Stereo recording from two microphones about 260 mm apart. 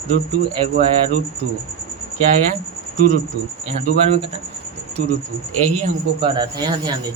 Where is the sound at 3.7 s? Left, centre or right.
Right.